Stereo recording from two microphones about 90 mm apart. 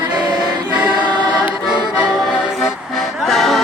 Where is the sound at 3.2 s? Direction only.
5° left (ahead or behind).